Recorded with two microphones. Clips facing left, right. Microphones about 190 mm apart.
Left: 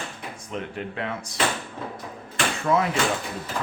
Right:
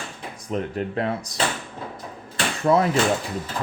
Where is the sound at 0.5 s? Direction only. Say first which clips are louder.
Right 6 dB; 40° right (ahead or behind).